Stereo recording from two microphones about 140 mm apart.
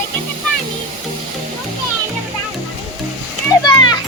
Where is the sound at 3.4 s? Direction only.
30° left (ahead or behind).